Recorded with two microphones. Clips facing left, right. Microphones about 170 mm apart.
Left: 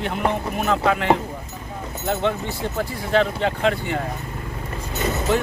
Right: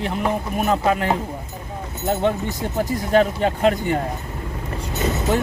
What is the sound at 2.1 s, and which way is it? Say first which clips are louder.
Speech: right 2 dB; 45° right (ahead or behind).